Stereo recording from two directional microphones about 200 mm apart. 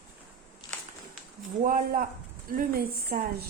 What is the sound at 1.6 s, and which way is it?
Speech, 45° right (ahead or behind).